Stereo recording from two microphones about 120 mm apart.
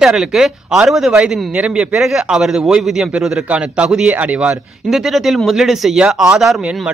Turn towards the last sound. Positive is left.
turn(degrees=-5)  # may be behind; listen again after turning